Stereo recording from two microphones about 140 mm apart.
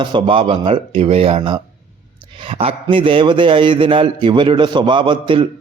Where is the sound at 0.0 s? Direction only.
35° right (ahead or behind).